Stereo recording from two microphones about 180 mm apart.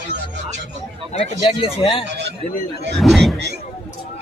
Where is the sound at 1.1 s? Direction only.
30° left (ahead or behind).